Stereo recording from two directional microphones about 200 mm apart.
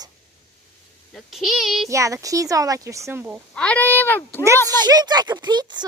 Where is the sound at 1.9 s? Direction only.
15° right (ahead or behind).